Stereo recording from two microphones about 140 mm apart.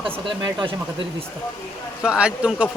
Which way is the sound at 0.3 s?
35° right (ahead or behind).